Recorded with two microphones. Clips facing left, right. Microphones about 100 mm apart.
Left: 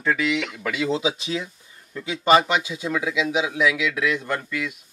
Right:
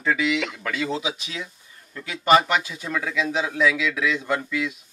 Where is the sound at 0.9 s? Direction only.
30° left (ahead or behind).